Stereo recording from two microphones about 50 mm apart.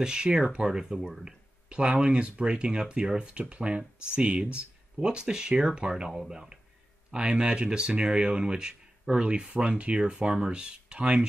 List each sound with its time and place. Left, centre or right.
0.0 s speech: centre